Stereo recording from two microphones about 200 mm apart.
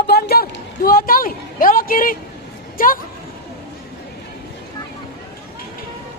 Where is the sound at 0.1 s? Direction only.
50° left (ahead or behind).